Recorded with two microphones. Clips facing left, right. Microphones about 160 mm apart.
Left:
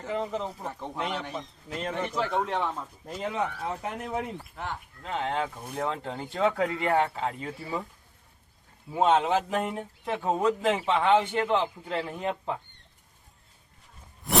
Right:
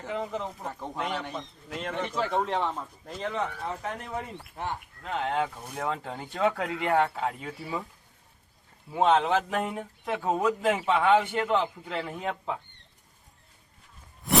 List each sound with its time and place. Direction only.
0.0 s speech: centre (ahead or behind)
2.2 s speech: 10° right (ahead or behind)
2.6 s speech: 5° left (ahead or behind)
4.5 s speech: 15° right (ahead or behind)
5.0 s speech: centre (ahead or behind)
8.9 s speech: 5° left (ahead or behind)
11.0 s a man's voice: 25° left (ahead or behind)
14.3 s a sound: centre (ahead or behind)